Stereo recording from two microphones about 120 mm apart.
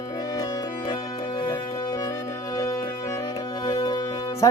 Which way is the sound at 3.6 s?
35° left (ahead or behind).